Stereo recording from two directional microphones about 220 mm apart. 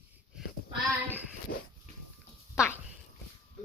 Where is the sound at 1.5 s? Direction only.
45° left (ahead or behind).